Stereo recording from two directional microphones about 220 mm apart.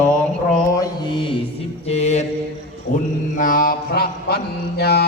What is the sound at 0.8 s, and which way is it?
Mantra, 20° left (ahead or behind).